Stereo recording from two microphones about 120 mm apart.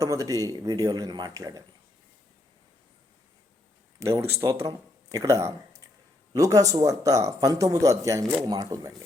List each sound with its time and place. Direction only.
0.0 s speech: 25° right (ahead or behind)
4.0 s speech: 25° right (ahead or behind)